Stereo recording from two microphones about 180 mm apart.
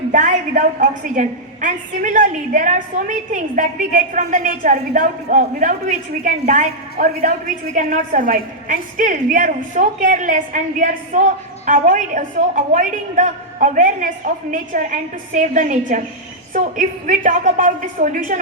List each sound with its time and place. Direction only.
0.1 s a woman's voice: 45° right (ahead or behind)